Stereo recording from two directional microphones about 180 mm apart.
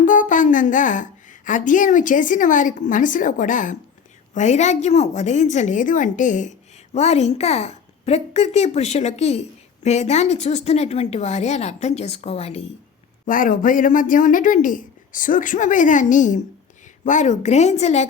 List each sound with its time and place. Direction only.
0.0 s a woman's voice: 45° left (ahead or behind)
13.2 s a woman's voice: 50° left (ahead or behind)